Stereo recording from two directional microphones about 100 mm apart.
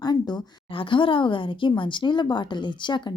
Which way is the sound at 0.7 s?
60° left (ahead or behind).